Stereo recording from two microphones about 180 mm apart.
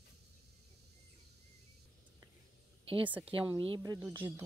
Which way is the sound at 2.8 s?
30° right (ahead or behind).